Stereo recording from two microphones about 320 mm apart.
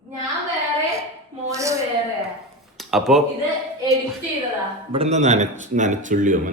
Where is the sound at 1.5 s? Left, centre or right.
Centre.